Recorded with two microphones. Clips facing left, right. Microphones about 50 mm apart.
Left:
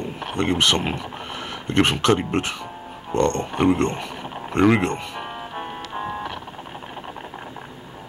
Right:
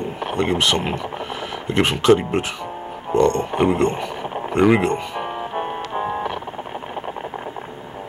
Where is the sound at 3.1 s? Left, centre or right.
Centre.